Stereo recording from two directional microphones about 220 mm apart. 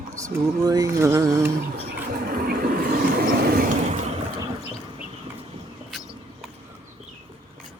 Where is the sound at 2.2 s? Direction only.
45° right (ahead or behind).